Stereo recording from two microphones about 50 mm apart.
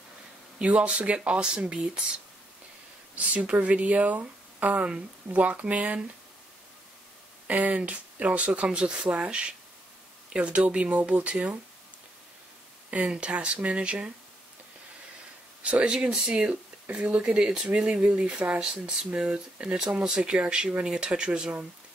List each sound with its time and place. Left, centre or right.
0.6 s speech: right
7.4 s speech: right
12.9 s speech: right
15.6 s speech: right
17.7 s speech: centre
18.0 s speech: right